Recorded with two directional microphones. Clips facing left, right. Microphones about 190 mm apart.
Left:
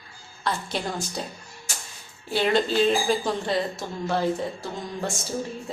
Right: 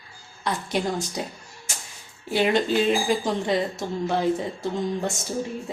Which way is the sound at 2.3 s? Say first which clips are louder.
Right 1 dB; 15° right (ahead or behind).